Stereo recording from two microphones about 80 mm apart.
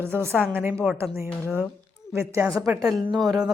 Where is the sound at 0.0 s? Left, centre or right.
Right.